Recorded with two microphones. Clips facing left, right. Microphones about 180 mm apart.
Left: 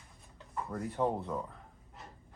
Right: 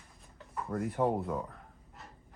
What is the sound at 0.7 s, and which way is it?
Speech, 5° right (ahead or behind).